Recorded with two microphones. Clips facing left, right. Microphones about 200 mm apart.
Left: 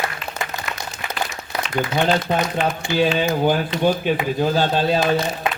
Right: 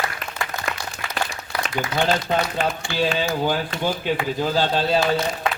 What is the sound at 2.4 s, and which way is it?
Speech, 20° left (ahead or behind).